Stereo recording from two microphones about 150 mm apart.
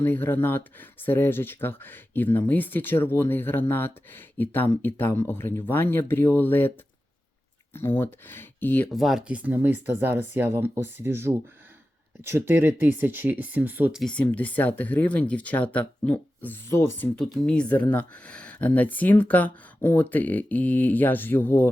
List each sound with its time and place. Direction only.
0.0 s speech: 15° left (ahead or behind)
8.9 s speech: centre (ahead or behind)
14.0 s speech: 10° left (ahead or behind)
17.2 s speech: 5° left (ahead or behind)